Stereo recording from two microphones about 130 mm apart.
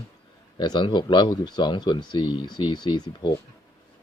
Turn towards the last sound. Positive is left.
turn(degrees=35)  # may be behind; listen again after turning